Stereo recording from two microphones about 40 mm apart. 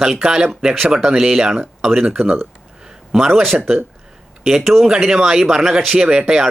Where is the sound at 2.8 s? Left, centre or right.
Centre.